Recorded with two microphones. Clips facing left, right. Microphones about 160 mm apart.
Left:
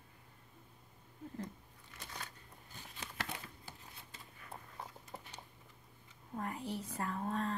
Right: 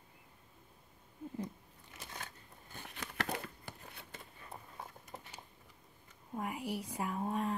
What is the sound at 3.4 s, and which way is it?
Shuffling cards, 60° right (ahead or behind).